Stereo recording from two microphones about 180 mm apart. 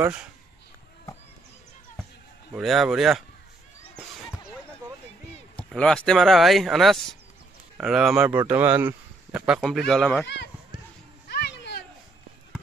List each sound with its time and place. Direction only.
0.0 s speech: 5° right (ahead or behind)
2.5 s speech: centre (ahead or behind)
5.6 s speech: 5° left (ahead or behind)
10.2 s speech: 70° left (ahead or behind)
11.2 s music: 65° left (ahead or behind)